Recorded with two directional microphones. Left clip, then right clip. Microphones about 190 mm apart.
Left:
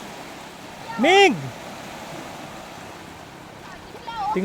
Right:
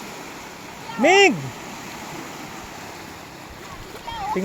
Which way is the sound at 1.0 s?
10° left (ahead or behind).